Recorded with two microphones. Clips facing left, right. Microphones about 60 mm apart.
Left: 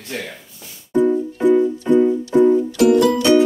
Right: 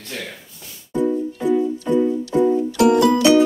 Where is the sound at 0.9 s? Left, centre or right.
Left.